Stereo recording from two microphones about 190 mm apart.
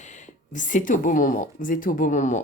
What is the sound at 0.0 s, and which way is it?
Speech, 40° left (ahead or behind).